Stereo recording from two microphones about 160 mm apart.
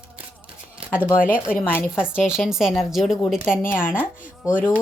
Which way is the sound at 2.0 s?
5° right (ahead or behind).